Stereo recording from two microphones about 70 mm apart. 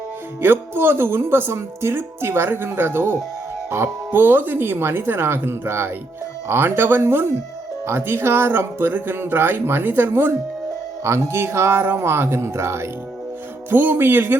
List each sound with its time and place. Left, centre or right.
0.4 s speech: right
13.7 s speech: right